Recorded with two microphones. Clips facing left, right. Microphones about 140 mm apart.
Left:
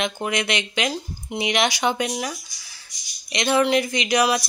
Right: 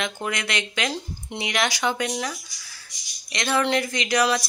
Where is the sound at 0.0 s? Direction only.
20° left (ahead or behind).